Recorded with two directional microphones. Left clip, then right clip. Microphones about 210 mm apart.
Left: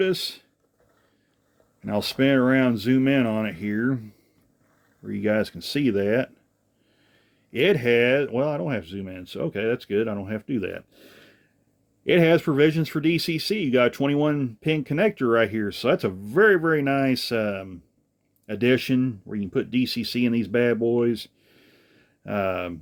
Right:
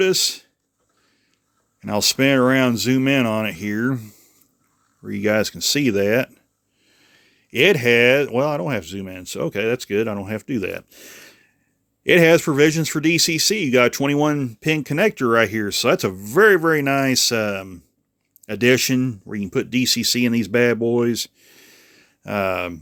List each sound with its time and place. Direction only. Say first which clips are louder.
0.0 s speech: right 6 dB; 40° right (ahead or behind)
1.8 s speech: right 5 dB; 45° right (ahead or behind)